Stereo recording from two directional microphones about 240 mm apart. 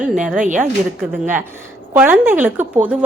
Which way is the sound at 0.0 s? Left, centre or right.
Centre.